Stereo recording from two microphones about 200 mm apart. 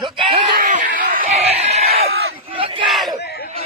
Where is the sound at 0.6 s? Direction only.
40° right (ahead or behind).